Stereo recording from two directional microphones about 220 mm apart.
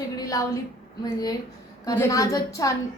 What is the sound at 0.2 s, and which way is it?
Speech, 15° left (ahead or behind).